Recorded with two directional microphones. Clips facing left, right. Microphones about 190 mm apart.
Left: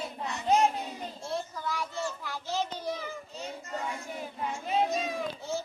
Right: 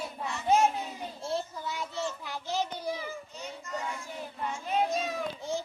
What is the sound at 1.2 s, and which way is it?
Children playing, 25° right (ahead or behind).